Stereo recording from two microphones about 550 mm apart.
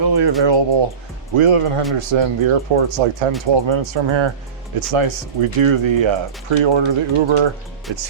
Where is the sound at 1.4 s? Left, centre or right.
Right.